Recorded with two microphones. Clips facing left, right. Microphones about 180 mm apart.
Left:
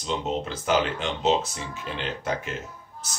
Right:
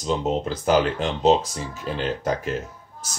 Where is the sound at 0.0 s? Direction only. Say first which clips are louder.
Right 5 dB; 40° right (ahead or behind).